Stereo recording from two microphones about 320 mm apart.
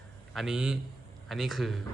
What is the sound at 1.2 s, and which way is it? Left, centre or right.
Speech, centre.